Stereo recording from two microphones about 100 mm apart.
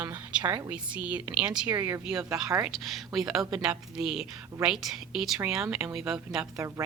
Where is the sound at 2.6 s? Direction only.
Centre (ahead or behind).